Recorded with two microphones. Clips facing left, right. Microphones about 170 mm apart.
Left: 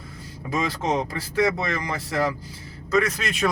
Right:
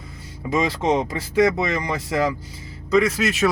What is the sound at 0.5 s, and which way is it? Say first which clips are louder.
Speech: right 4 dB; 25° right (ahead or behind).